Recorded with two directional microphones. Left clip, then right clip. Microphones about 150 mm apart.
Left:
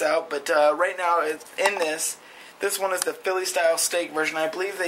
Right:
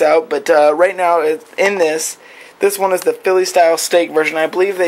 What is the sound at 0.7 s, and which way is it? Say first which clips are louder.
Speech: right 10 dB; 30° right (ahead or behind).